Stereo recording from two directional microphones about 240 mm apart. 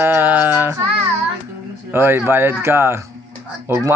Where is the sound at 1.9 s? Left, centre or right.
Centre.